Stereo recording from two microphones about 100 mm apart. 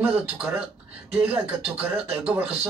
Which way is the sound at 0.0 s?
15° right (ahead or behind).